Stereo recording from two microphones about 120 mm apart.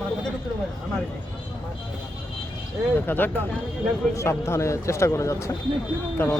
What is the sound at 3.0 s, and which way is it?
Speech, 15° left (ahead or behind).